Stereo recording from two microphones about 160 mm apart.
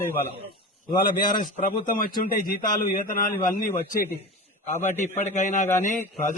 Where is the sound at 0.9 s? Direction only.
30° left (ahead or behind).